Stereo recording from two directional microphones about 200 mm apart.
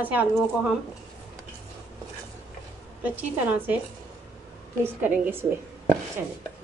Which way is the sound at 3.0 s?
10° right (ahead or behind).